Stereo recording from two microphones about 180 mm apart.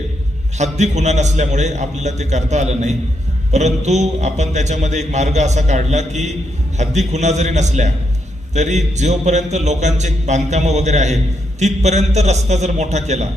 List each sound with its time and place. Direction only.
0.6 s a man's voice: 40° right (ahead or behind)